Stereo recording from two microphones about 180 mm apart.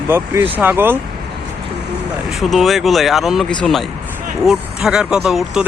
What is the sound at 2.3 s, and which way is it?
Speech, centre (ahead or behind).